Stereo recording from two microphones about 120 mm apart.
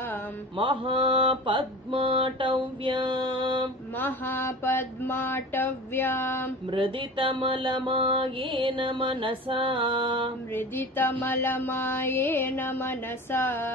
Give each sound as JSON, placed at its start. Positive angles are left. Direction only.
{"t": 0.6, "sound": "mantra", "side_deg": -45}
{"t": 4.0, "sound": "music", "side_deg": 20}
{"t": 6.7, "sound": "mantra", "side_deg": -45}
{"t": 10.5, "sound": "music", "side_deg": 15}